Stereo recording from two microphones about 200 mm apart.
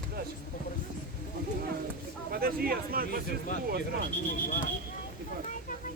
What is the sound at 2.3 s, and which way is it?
Speech, 50° right (ahead or behind).